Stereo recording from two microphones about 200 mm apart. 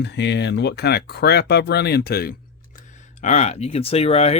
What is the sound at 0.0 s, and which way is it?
Speech, 60° left (ahead or behind).